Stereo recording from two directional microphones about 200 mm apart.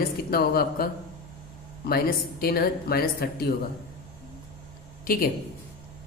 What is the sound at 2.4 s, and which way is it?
Speech, 50° left (ahead or behind).